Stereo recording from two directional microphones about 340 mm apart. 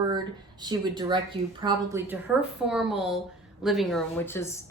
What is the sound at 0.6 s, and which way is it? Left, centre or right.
Speech, centre.